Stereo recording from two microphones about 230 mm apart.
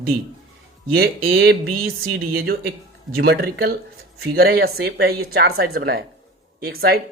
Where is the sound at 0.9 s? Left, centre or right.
Right.